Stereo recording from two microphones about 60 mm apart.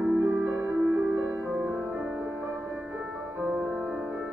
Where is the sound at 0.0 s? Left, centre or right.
Right.